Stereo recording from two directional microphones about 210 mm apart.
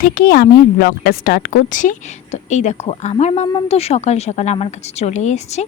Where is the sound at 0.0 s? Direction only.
45° left (ahead or behind).